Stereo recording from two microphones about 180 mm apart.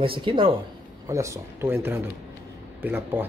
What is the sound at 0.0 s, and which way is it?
Speech, 30° right (ahead or behind).